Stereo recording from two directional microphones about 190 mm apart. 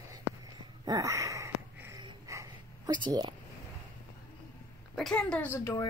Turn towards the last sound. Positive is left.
turn(degrees=15)  # may be behind; listen again after turning